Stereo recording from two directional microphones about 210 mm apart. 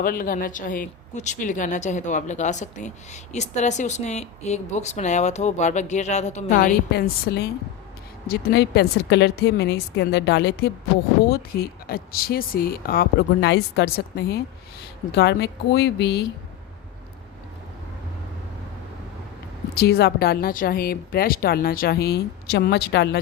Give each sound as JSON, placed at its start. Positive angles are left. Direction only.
{"t": 0.0, "sound": "speech", "side_deg": 45}
{"t": 6.6, "sound": "a woman's voice", "side_deg": 50}
{"t": 11.9, "sound": "a woman's voice", "side_deg": 45}
{"t": 19.7, "sound": "a woman's voice", "side_deg": 50}